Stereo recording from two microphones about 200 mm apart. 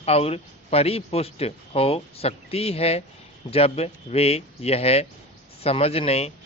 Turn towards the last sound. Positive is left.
turn(degrees=30)  # may be behind; listen again after turning